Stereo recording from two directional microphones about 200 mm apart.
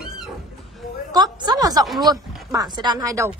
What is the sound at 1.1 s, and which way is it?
Speech, 20° right (ahead or behind).